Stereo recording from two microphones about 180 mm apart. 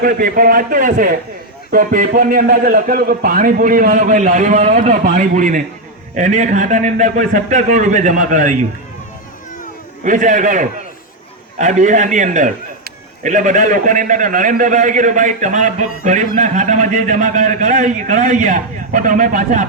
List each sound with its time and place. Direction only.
0.0 s a man's voice: 50° right (ahead or behind)
10.0 s a man's voice: 45° right (ahead or behind)